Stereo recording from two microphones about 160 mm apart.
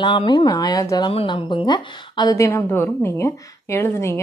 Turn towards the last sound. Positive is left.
turn(degrees=15)  # may be behind; listen again after turning